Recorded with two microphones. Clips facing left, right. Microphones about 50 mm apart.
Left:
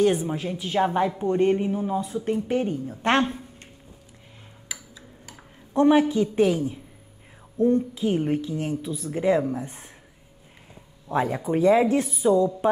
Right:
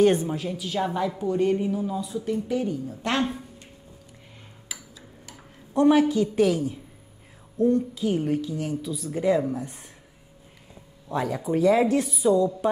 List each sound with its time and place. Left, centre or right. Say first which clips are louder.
0.2 s speech: left 1 dB; centre; by 3.3 s left
5.3 s speech: left 1 dB; left
11.1 s speech: left 2 dB; left